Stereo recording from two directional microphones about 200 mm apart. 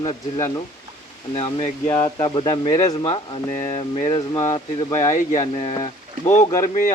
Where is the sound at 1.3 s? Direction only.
30° left (ahead or behind).